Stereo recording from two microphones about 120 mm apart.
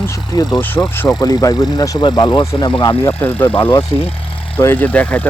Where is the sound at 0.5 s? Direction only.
15° left (ahead or behind).